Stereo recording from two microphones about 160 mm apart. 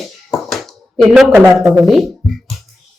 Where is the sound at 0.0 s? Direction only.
Centre (ahead or behind).